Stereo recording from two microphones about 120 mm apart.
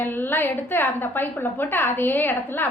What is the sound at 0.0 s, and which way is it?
A woman's voice, 15° left (ahead or behind).